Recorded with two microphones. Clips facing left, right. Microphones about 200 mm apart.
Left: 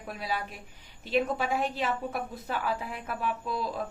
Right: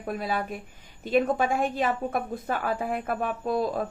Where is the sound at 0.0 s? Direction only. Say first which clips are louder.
Right 5 dB; 50° right (ahead or behind).